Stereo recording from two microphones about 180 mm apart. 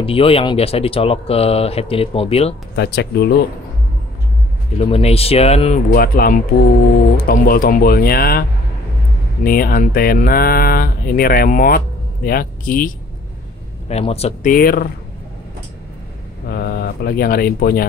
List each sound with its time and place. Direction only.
0.0 s speech: 30° left (ahead or behind)
2.7 s speech: 65° left (ahead or behind)
4.7 s speech: 35° left (ahead or behind)
5.9 s speech: 55° left (ahead or behind)
13.8 s speech: 35° left (ahead or behind)
14.5 s speech: 55° left (ahead or behind)
16.4 s speech: 60° left (ahead or behind)